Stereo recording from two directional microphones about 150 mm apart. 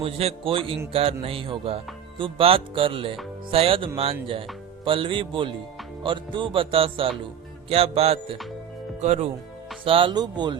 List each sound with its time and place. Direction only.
0.0 s music: 40° right (ahead or behind)
9.0 s speech: 50° right (ahead or behind)
9.8 s music: 35° right (ahead or behind)